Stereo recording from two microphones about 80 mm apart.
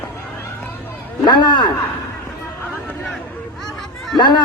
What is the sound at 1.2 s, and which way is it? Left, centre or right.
Speech, left.